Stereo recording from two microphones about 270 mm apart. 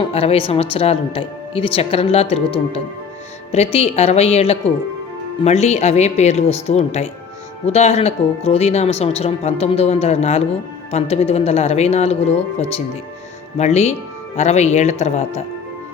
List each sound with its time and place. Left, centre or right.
0.1 s a woman's voice: left